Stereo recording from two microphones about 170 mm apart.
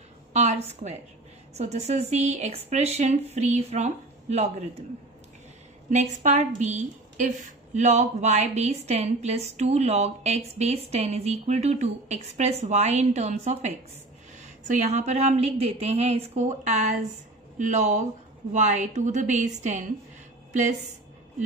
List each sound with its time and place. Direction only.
0.3 s a woman's voice: 40° right (ahead or behind)
5.9 s a woman's voice: 45° right (ahead or behind)